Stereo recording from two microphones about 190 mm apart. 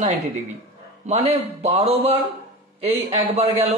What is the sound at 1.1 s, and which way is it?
Speech, 35° right (ahead or behind).